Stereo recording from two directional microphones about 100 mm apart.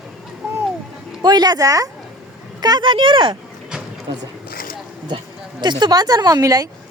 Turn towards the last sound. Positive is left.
turn(degrees=-35)  # may be behind; listen again after turning